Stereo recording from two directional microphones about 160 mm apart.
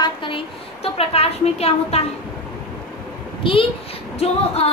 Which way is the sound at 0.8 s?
40° left (ahead or behind).